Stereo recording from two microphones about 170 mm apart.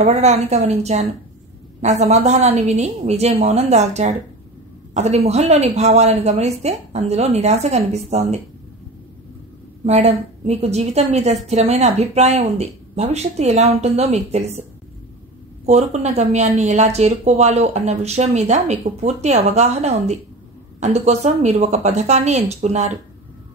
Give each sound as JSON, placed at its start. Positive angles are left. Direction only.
{"t": 0.0, "sound": "speech", "side_deg": -40}
{"t": 9.8, "sound": "speech", "side_deg": -40}
{"t": 15.6, "sound": "speech", "side_deg": -40}